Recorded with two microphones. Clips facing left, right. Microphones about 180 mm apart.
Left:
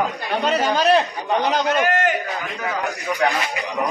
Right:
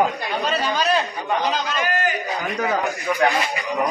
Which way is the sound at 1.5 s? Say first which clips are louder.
Left 5 dB; 60° left (ahead or behind).